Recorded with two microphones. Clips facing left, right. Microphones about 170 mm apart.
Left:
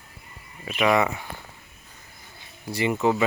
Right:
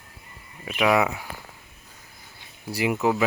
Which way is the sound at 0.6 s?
5° right (ahead or behind).